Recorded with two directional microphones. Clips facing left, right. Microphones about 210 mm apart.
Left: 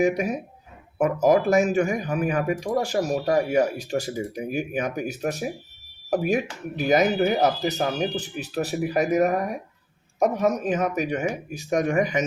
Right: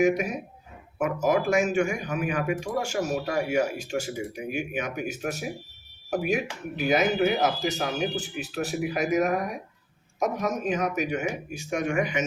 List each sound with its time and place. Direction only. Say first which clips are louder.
0.9 s speech: left 5 dB; 40° left (ahead or behind)